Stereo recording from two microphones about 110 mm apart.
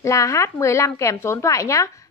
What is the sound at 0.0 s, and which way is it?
A woman's voice, 30° left (ahead or behind).